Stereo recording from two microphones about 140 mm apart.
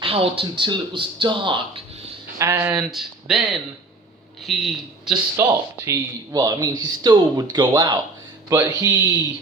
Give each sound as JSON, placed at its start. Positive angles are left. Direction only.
{"t": 0.0, "sound": "speech", "side_deg": -40}
{"t": 2.4, "sound": "speech", "side_deg": -20}
{"t": 2.7, "sound": "speech", "side_deg": -5}
{"t": 5.4, "sound": "a man's voice", "side_deg": -20}